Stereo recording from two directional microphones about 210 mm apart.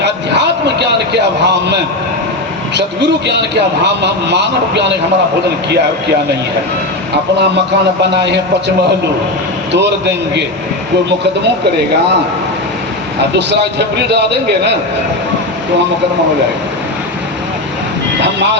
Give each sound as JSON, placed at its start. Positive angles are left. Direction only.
{"t": 0.0, "sound": "a sound", "side_deg": -55}
{"t": 2.7, "sound": "a man's voice", "side_deg": -55}
{"t": 8.2, "sound": "a man's voice", "side_deg": -55}
{"t": 9.7, "sound": "a man's voice", "side_deg": -55}
{"t": 13.5, "sound": "a man's voice", "side_deg": -55}